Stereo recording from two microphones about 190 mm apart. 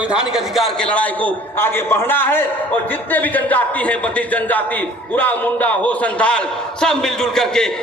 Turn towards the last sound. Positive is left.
turn(degrees=5)  # may be behind; listen again after turning